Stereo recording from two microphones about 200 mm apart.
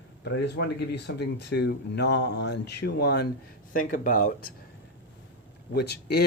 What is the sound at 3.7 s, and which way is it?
Speech, 45° left (ahead or behind).